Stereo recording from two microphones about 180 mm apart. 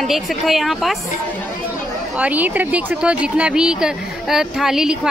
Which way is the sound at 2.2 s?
10° right (ahead or behind).